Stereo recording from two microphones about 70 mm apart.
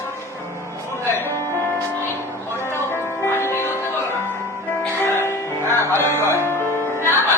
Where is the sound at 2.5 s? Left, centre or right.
Left.